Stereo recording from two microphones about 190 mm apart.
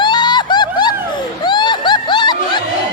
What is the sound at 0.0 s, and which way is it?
Vehicle, 25° left (ahead or behind).